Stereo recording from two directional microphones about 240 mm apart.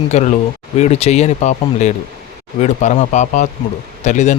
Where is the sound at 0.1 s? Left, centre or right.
Left.